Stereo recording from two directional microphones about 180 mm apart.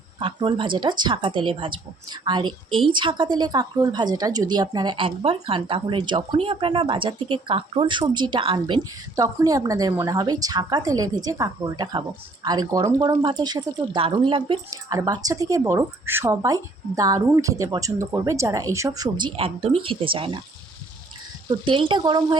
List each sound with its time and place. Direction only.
0.2 s speech: 30° right (ahead or behind)
21.6 s speech: 30° right (ahead or behind)